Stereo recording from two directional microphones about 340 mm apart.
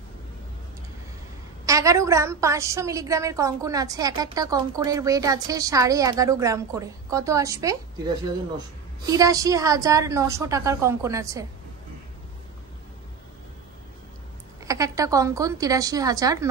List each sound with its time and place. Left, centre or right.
1.7 s a woman's voice: centre
9.0 s a woman's voice: centre
14.6 s a woman's voice: centre